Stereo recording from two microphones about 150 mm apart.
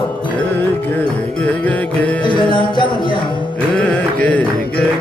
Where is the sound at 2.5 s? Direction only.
30° left (ahead or behind).